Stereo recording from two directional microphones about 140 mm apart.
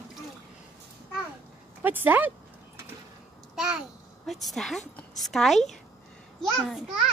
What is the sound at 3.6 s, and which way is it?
A child's voice, 5° right (ahead or behind).